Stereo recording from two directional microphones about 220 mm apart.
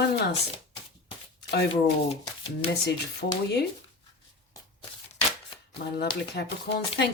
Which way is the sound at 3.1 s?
50° left (ahead or behind).